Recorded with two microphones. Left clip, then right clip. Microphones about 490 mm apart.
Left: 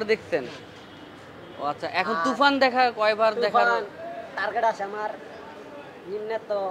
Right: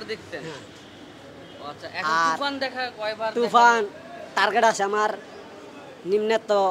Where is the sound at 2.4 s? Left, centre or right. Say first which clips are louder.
Left 8 dB; left.